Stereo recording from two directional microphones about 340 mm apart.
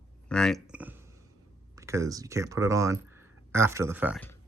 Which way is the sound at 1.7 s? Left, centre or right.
Centre.